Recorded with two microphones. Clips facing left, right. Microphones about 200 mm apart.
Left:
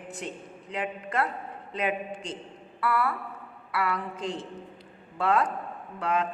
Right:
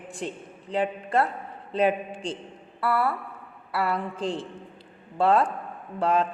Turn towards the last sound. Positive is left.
turn(degrees=-30)  # may be behind; listen again after turning